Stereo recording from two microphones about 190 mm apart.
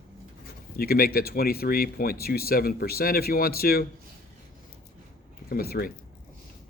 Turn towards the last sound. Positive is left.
turn(degrees=50)  # may be behind; listen again after turning